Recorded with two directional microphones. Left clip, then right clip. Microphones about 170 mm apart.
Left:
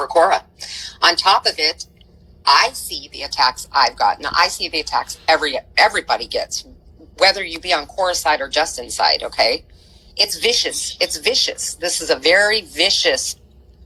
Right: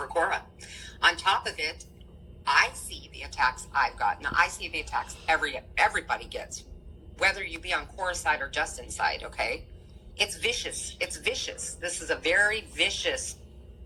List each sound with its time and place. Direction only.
0.0 s a woman's voice: 45° left (ahead or behind)
3.4 s a woman's voice: 50° left (ahead or behind)